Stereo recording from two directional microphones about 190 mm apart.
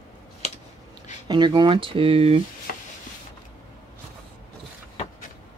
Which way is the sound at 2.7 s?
50° left (ahead or behind).